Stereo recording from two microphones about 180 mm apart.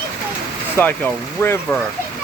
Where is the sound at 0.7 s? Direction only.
10° left (ahead or behind).